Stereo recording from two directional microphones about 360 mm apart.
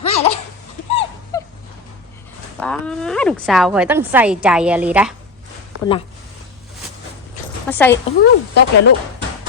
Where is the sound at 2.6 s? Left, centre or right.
Centre.